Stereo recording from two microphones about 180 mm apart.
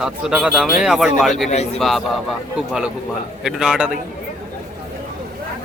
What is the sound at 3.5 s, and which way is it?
Speech, 5° right (ahead or behind).